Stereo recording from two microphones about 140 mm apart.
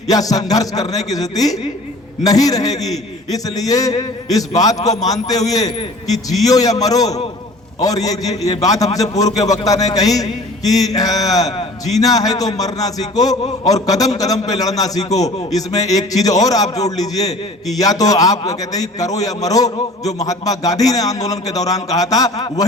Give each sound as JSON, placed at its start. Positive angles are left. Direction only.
{"t": 0.1, "sound": "a man's voice", "side_deg": 25}